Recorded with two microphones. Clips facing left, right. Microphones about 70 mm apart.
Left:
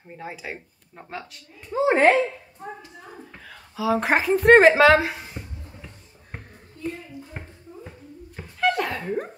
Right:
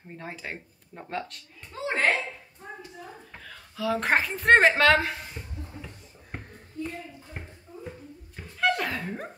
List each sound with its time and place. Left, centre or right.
0.1 s a woman's voice: centre
1.8 s speech: left
3.3 s a woman's voice: centre
8.4 s a sound: centre